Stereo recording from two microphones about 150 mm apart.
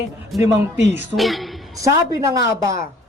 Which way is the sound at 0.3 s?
Centre (ahead or behind).